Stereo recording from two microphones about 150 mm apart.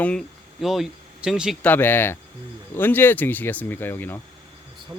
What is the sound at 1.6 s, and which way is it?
Speech, 15° left (ahead or behind).